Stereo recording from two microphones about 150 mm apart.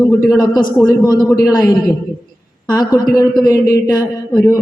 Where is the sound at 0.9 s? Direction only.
25° left (ahead or behind).